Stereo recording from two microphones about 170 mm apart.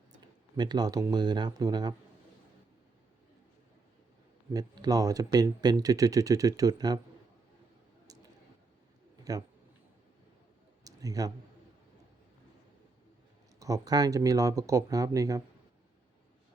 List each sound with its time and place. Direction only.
0.5 s speech: 25° right (ahead or behind)
4.5 s speech: 25° right (ahead or behind)
8.0 s squish: 20° right (ahead or behind)
10.8 s clicking: 20° right (ahead or behind)
13.6 s speech: 20° right (ahead or behind)